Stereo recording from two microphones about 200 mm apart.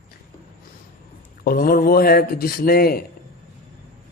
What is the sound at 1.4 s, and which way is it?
A man's voice, 45° left (ahead or behind).